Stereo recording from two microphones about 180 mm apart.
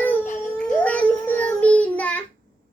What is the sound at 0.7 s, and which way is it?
Child singing, 10° left (ahead or behind).